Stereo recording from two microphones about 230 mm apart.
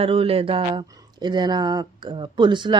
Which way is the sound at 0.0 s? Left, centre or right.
Right.